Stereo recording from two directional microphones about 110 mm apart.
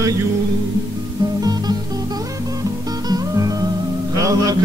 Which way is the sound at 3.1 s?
35° right (ahead or behind).